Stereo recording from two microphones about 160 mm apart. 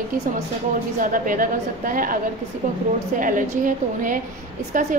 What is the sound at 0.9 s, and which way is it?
A woman's voice, 55° right (ahead or behind).